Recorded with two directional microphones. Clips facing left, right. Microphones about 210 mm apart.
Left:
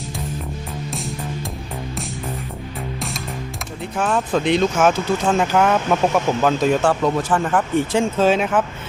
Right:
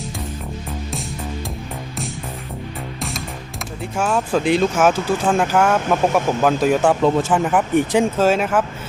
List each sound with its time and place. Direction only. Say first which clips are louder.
3.9 s speech: right 1 dB; centre (ahead or behind)
7.0 s speech: right 3 dB; 25° right (ahead or behind)
7.3 s speech: right 2 dB; 10° right (ahead or behind)